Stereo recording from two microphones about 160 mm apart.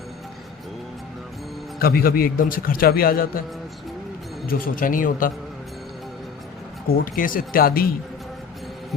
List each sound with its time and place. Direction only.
1.8 s a man's voice: 70° left (ahead or behind)
4.4 s a man's voice: 65° left (ahead or behind)
6.8 s a man's voice: 65° left (ahead or behind)